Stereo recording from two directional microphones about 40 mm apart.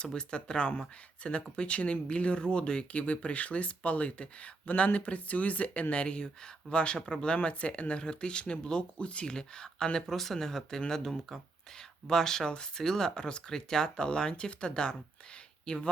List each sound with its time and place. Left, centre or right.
0.0 s speech: left
3.0 s speech: left; by 10.0 s centre
10.1 s speech: centre; by 15.9 s left